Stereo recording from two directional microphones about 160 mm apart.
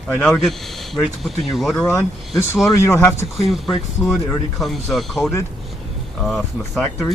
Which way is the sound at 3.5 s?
Centre (ahead or behind).